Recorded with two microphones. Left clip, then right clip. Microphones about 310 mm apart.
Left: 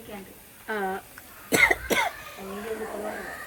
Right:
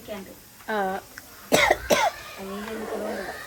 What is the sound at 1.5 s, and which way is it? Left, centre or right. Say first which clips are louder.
Cough: right 2 dB; centre.